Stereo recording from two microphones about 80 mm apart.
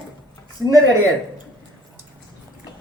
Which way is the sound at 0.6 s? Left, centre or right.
Left.